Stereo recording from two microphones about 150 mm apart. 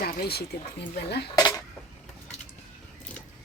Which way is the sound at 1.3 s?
25° left (ahead or behind).